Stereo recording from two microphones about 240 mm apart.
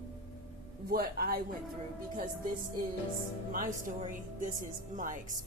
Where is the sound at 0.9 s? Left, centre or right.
Right.